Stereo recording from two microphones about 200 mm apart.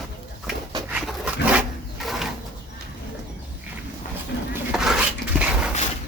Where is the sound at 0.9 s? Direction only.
5° right (ahead or behind).